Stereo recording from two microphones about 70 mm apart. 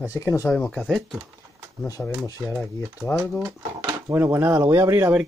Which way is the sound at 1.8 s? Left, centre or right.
Left.